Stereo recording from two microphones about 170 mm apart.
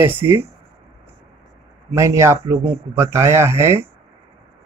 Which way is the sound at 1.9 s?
15° right (ahead or behind).